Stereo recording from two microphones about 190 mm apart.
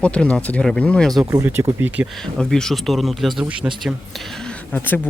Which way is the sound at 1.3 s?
15° right (ahead or behind).